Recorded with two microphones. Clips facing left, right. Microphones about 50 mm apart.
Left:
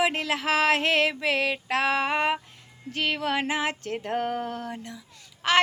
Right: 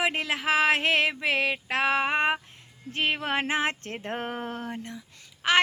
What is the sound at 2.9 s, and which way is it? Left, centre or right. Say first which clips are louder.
Speech: even; right.